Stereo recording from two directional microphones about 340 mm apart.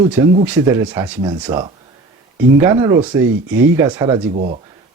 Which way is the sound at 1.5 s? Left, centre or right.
Centre.